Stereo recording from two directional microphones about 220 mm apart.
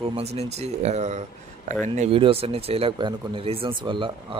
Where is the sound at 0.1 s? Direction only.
30° right (ahead or behind).